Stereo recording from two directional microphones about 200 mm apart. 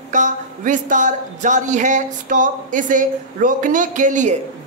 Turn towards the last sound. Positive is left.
turn(degrees=-40)  # may be behind; listen again after turning